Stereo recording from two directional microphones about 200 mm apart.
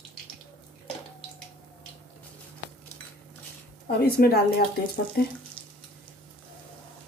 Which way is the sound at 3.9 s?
50° left (ahead or behind).